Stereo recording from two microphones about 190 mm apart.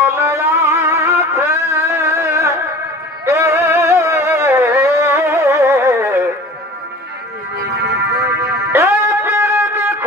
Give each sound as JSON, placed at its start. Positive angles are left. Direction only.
{"t": 0.0, "sound": "music", "side_deg": -15}
{"t": 7.6, "sound": "music", "side_deg": -60}
{"t": 8.7, "sound": "music", "side_deg": -15}